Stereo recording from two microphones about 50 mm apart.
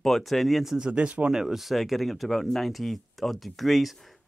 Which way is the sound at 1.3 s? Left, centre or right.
Centre.